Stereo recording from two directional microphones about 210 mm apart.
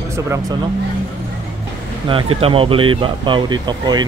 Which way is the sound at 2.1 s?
25° right (ahead or behind).